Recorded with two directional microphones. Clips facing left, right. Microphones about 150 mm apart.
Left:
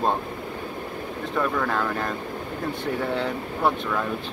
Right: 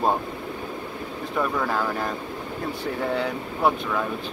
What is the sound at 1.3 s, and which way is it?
Speech, 5° right (ahead or behind).